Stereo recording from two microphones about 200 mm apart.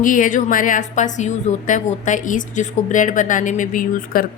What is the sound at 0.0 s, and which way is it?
A woman's voice, 40° left (ahead or behind).